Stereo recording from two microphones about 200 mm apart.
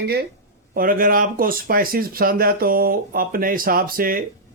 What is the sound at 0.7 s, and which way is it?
Speech, 45° right (ahead or behind).